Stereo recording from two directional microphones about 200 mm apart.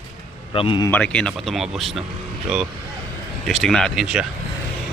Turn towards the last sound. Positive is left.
turn(degrees=-5)  # may be behind; listen again after turning